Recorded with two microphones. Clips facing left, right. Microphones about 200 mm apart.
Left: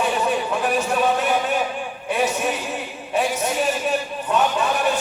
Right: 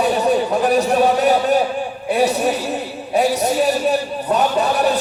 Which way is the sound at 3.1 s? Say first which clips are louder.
Right 5 dB; 35° right (ahead or behind).